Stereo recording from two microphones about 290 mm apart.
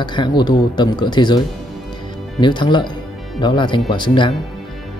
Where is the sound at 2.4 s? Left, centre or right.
Centre.